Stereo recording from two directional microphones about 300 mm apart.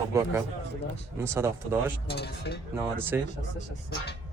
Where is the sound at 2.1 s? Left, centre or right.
Left.